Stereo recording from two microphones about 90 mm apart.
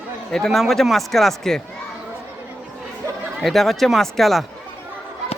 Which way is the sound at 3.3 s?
5° left (ahead or behind).